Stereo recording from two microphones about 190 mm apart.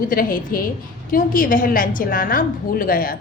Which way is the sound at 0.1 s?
50° left (ahead or behind).